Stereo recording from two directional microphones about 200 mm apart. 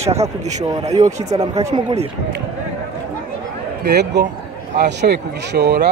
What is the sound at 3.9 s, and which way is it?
Speech, 60° right (ahead or behind).